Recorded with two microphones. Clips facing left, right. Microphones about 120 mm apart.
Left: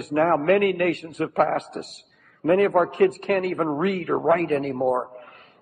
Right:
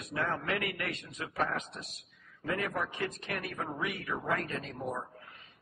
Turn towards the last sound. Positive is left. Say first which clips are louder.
# left 15 dB
turn(degrees=55)  # may be behind; listen again after turning